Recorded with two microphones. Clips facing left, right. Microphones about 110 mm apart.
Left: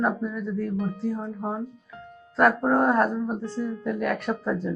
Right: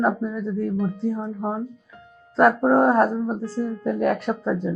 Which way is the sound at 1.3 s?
10° right (ahead or behind).